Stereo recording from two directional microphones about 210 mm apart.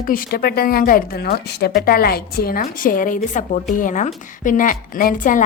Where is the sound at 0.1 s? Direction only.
45° left (ahead or behind).